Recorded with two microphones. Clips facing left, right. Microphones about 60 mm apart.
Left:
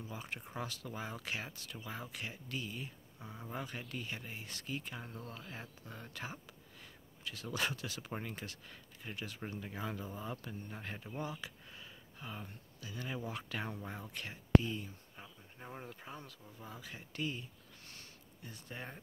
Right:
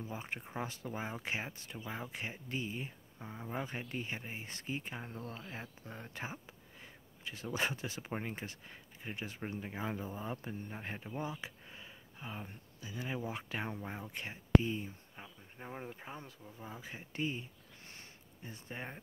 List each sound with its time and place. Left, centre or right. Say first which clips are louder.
0.0 s speech: right 2 dB; right